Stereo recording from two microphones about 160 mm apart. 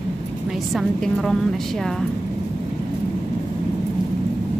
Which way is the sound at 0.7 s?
Centre (ahead or behind).